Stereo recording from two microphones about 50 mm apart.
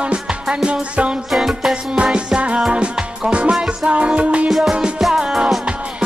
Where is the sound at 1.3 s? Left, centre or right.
Centre.